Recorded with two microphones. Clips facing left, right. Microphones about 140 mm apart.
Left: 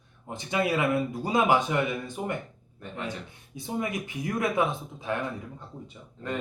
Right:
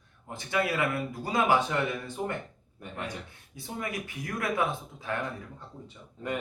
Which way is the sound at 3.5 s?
20° left (ahead or behind).